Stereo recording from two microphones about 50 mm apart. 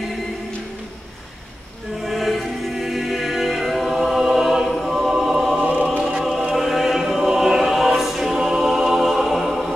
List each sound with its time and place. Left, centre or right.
2.0 s choir: centre
5.6 s choir: right
6.2 s choir: centre